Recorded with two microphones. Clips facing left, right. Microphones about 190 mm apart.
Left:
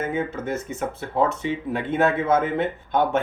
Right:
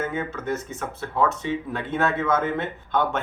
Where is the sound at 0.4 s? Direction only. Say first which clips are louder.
Left 2 dB; 55° left (ahead or behind).